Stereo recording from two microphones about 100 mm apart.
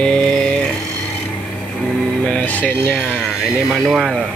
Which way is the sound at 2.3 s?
15° left (ahead or behind).